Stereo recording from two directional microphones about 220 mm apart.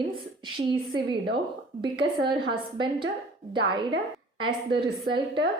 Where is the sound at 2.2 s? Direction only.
20° right (ahead or behind).